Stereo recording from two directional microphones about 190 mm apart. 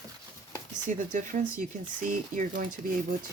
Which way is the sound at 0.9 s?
40° right (ahead or behind).